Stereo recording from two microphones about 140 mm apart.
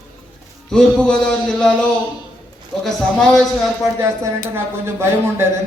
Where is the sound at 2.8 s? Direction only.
5° left (ahead or behind).